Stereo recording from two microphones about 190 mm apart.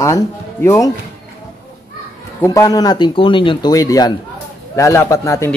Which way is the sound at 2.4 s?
15° left (ahead or behind).